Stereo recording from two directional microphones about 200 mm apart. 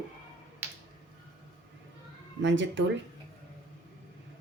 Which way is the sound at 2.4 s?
65° right (ahead or behind).